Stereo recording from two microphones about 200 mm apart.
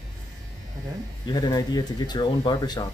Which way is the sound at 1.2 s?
20° left (ahead or behind).